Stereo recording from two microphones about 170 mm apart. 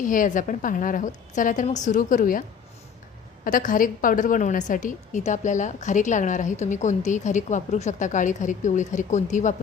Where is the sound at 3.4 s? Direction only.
50° left (ahead or behind).